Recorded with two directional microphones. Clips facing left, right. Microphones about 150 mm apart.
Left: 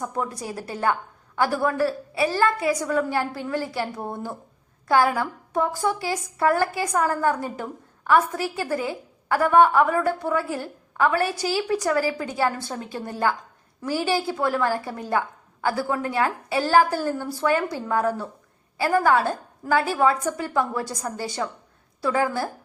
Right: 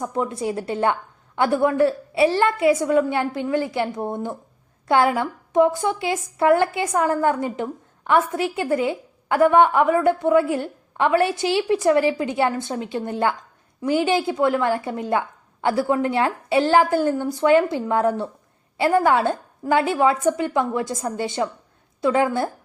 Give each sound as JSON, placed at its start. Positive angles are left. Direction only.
{"t": 0.0, "sound": "a woman's voice", "side_deg": -25}